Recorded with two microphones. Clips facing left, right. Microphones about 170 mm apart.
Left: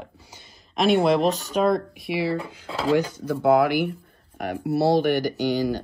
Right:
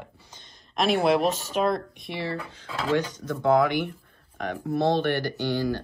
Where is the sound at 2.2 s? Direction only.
10° left (ahead or behind).